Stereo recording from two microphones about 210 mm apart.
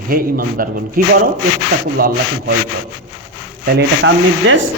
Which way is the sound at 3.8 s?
60° right (ahead or behind).